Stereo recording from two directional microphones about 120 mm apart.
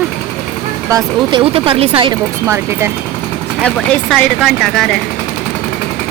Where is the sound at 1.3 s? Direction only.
45° right (ahead or behind).